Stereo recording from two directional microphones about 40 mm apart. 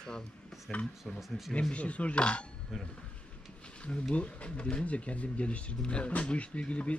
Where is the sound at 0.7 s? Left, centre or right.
Centre.